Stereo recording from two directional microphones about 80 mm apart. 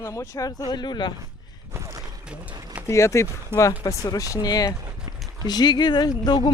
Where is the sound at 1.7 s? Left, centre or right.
Right.